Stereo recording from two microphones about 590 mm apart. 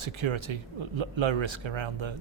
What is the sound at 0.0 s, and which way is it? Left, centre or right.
Speech, right.